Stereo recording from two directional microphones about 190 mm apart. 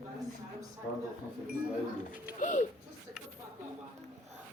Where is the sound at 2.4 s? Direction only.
40° left (ahead or behind).